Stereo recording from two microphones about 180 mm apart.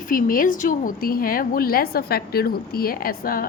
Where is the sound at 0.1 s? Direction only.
50° left (ahead or behind).